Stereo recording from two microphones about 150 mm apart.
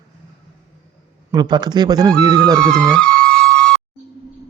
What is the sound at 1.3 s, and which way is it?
Speech, 30° right (ahead or behind).